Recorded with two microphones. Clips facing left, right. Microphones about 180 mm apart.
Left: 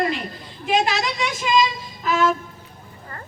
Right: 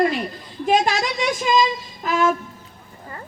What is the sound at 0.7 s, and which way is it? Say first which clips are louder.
Speech: right 2 dB; 45° right (ahead or behind).